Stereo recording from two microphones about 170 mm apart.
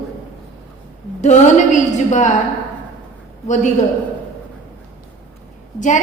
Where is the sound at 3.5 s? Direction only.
45° left (ahead or behind).